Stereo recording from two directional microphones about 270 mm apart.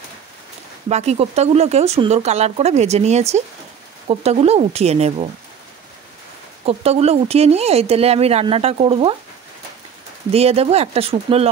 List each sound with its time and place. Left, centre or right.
0.8 s speech: right
6.6 s speech: right
10.3 s speech: right